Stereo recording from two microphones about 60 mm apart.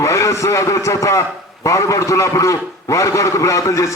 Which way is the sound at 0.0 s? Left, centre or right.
Left.